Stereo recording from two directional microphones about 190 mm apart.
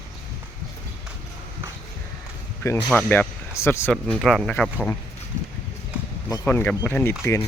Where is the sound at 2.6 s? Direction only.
15° left (ahead or behind).